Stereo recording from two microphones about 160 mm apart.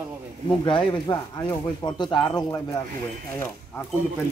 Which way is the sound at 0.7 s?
30° left (ahead or behind).